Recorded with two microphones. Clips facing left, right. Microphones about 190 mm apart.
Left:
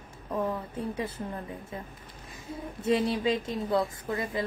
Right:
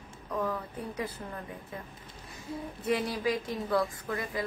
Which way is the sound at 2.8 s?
25° left (ahead or behind).